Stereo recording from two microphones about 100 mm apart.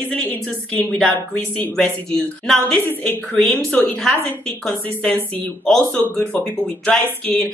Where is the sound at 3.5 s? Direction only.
20° left (ahead or behind).